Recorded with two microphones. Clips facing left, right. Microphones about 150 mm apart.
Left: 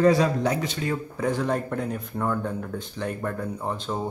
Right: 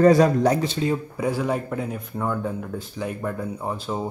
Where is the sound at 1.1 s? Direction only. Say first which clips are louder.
Right 1 dB; 10° right (ahead or behind).